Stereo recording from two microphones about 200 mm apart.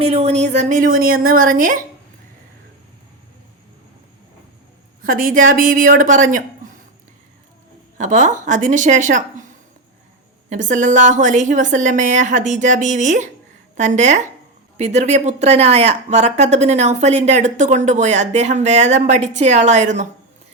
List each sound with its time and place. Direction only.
0.0 s speech: 30° right (ahead or behind)
5.0 s speech: 45° right (ahead or behind)
7.9 s speech: 40° right (ahead or behind)
10.5 s speech: 40° right (ahead or behind)